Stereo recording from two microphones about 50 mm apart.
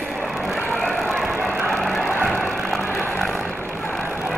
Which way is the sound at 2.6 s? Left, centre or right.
Centre.